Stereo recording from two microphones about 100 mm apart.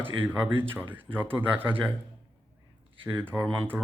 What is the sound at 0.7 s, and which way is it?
A man's voice, 20° right (ahead or behind).